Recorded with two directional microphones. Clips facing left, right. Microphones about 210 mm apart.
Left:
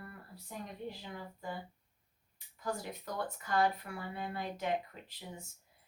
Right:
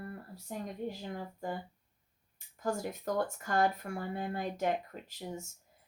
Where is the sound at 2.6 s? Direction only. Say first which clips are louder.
Right 5 dB; 45° right (ahead or behind).